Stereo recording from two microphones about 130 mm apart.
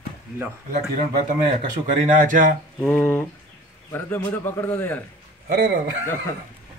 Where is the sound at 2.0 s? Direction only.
90° right.